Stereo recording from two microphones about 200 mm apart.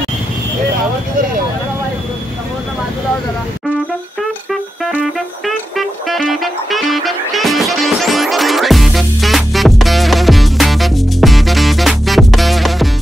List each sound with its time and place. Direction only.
5.8 s music: centre (ahead or behind)